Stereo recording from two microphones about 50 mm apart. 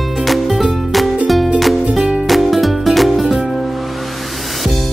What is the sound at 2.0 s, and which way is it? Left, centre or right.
Music, centre.